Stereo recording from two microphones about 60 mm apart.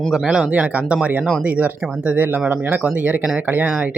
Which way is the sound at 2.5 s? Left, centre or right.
Right.